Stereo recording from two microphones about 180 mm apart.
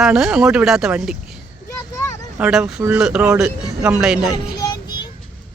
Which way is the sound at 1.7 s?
15° left (ahead or behind).